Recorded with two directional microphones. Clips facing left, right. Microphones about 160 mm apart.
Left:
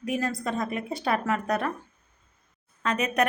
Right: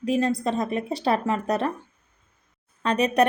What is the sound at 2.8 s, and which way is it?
Speech, 35° right (ahead or behind).